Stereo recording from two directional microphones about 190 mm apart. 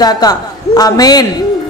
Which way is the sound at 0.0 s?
20° left (ahead or behind).